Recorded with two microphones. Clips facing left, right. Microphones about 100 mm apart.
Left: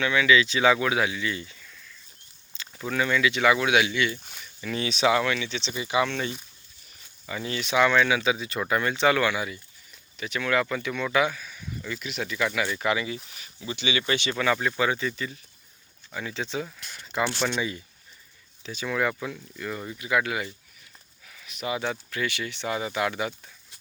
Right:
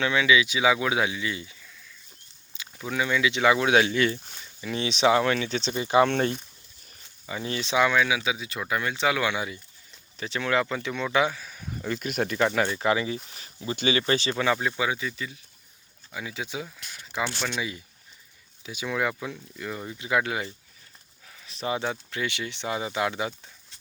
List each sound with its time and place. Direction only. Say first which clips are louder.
0.0 s speech: left 1 dB; 25° right (ahead or behind)
0.3 s speech: left 1 dB; 10° right (ahead or behind)
2.7 s speech: left 1 dB; 10° right (ahead or behind); by 4.2 s 40° right (ahead or behind)
4.4 s speech: even; 25° right (ahead or behind); by 6.3 s 50° right (ahead or behind)
7.3 s speech: even; 20° right (ahead or behind)
7.8 s speech: left 2 dB; 10° right (ahead or behind)
9.2 s speech: left 1 dB; 20° right (ahead or behind); by 12.5 s 50° right (ahead or behind)
12.7 s speech: right 2 dB; 30° right (ahead or behind)
13.3 s a sound: right 3 dB; 35° right (ahead or behind)
14.1 s speech: right 1 dB; 30° right (ahead or behind)
14.7 s speech: left 2 dB; 5° right (ahead or behind)
20.0 s speech: even; 25° right (ahead or behind)
21.2 s livestock: right 1 dB; 30° right (ahead or behind)
21.8 s speech: left 1 dB; 20° right (ahead or behind)